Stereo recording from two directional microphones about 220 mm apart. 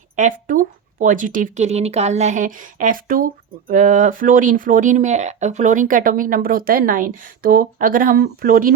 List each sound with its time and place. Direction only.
0.2 s speech: 35° right (ahead or behind)